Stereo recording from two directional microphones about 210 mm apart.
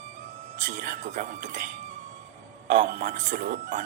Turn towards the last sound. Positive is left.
turn(degrees=-35)  # may be behind; listen again after turning